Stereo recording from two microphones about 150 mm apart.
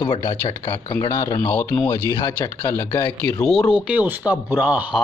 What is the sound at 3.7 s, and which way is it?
Speech, 5° right (ahead or behind).